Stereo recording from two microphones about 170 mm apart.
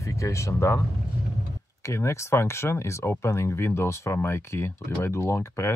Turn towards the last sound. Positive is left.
turn(degrees=15)  # may be behind; listen again after turning